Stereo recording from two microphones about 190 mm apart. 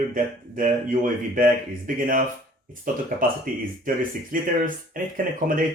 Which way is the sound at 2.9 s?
45° right (ahead or behind).